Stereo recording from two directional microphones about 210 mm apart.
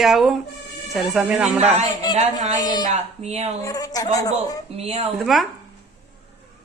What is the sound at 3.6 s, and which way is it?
Speech, 15° left (ahead or behind).